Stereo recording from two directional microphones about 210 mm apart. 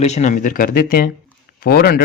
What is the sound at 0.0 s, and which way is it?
Speech, 30° left (ahead or behind).